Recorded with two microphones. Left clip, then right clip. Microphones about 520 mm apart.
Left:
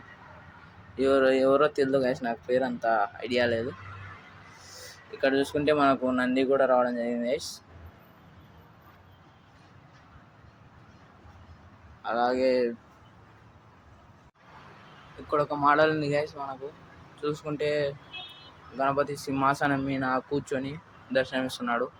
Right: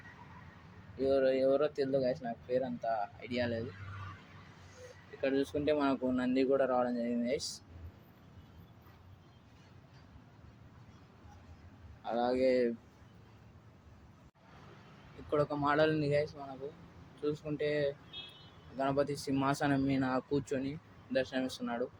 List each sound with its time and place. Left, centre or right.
0.9 s speech: right
5.2 s speech: right
12.0 s speech: right
15.3 s speech: right